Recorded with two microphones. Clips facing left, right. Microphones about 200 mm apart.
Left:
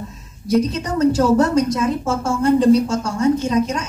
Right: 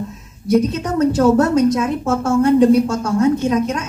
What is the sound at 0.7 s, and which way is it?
A woman's voice, 60° right (ahead or behind).